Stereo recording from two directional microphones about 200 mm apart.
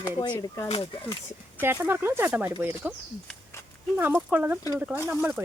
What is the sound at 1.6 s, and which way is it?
Speech, 10° right (ahead or behind).